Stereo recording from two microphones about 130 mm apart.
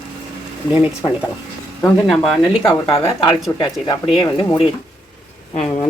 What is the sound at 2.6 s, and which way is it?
Speech, 45° left (ahead or behind).